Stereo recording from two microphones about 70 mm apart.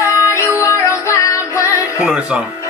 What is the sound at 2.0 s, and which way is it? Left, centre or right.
Music, centre.